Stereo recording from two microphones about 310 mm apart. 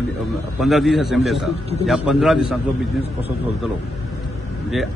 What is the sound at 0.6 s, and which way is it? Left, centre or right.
A man's voice, centre.